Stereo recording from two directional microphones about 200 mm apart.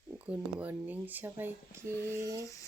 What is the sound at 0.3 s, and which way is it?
Speech, 10° right (ahead or behind).